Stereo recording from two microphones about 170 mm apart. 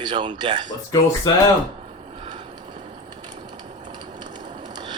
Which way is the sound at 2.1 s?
35° right (ahead or behind).